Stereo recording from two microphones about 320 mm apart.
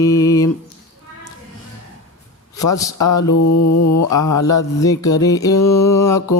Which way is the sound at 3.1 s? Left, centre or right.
Left.